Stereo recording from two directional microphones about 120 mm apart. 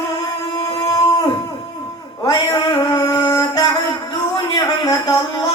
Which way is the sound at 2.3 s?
30° left (ahead or behind).